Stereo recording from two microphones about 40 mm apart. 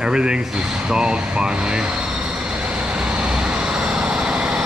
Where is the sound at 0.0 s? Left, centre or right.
Right.